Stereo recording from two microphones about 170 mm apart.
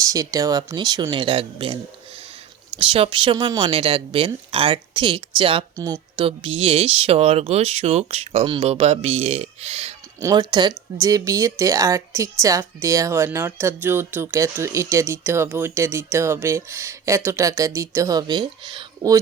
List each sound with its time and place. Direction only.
0.0 s speech: 20° right (ahead or behind); by 9.9 s 35° right (ahead or behind)
10.2 s a woman's voice: 20° right (ahead or behind)